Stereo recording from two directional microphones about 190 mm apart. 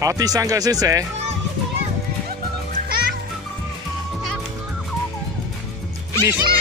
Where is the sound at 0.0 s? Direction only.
20° right (ahead or behind).